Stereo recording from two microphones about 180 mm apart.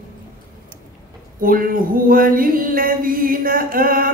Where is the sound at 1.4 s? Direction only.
50° right (ahead or behind).